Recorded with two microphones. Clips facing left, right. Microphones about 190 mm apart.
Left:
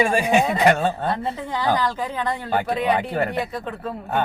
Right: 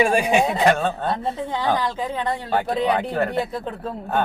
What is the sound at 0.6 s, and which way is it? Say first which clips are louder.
Speech: left 1 dB; 5° left (ahead or behind).